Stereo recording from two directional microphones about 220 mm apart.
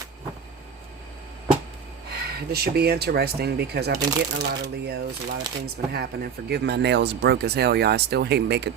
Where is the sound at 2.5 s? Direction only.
45° right (ahead or behind).